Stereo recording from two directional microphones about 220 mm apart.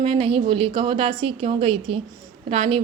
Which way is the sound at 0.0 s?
25° right (ahead or behind).